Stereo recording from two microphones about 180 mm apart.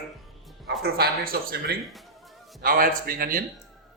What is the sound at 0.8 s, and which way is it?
Speech, 60° right (ahead or behind).